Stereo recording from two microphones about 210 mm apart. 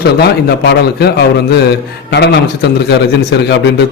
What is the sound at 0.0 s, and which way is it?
A man's voice, 50° left (ahead or behind).